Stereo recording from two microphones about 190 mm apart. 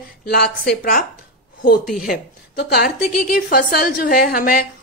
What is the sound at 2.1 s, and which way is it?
A woman's voice, 55° left (ahead or behind).